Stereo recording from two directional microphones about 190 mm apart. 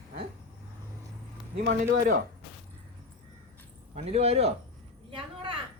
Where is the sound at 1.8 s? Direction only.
45° right (ahead or behind).